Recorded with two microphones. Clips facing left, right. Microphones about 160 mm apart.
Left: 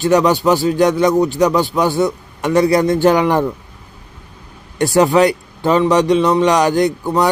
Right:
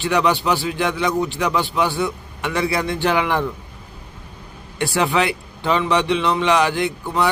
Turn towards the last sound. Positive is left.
turn(degrees=40)  # may be behind; listen again after turning